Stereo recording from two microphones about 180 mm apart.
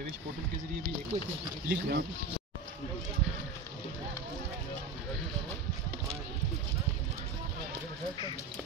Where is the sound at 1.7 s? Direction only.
60° right (ahead or behind).